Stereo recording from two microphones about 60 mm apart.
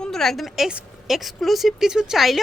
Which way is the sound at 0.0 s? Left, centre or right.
Centre.